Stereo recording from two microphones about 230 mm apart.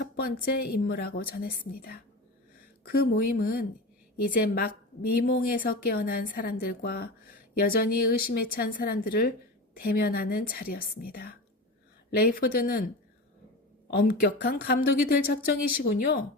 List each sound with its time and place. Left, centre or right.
0.0 s a woman's voice: left
13.9 s a woman's voice: left